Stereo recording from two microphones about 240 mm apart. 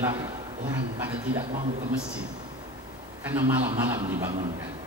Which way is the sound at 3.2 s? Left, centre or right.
Centre.